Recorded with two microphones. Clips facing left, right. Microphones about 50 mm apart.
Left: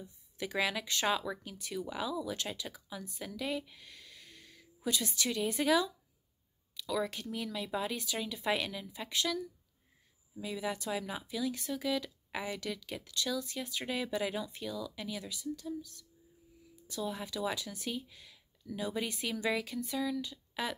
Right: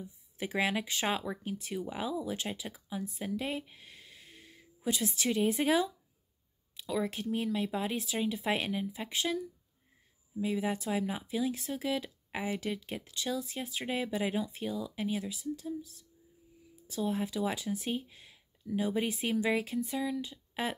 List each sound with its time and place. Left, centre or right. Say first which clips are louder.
0.0 s speech: right 2 dB; centre
3.2 s a sound: even; right
5.2 s speech: right 4 dB; right
6.9 s speech: right 2 dB; right
7.9 s speech: right 5 dB; centre
11.2 s speech: right 3 dB; centre
13.6 s speech: right 2 dB; right
17.0 s speech: right 4 dB; right